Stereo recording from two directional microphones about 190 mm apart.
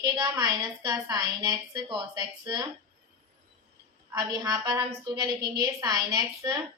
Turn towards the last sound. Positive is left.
turn(degrees=-20)  # may be behind; listen again after turning